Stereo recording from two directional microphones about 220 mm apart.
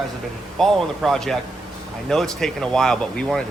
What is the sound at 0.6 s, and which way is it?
Speech, centre (ahead or behind).